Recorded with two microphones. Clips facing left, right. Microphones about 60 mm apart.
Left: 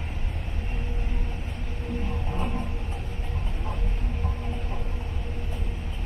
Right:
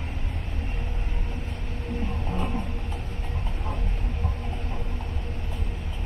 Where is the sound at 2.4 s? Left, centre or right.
Centre.